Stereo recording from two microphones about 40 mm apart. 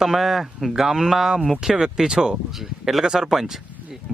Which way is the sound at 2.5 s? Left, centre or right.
Centre.